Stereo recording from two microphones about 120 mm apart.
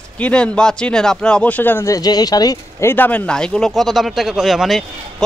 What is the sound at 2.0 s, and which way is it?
Speech, 35° left (ahead or behind).